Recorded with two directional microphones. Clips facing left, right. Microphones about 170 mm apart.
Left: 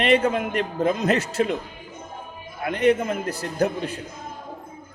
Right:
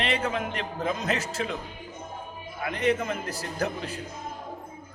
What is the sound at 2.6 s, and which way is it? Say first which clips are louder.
Speech: left 6 dB; 60° left (ahead or behind).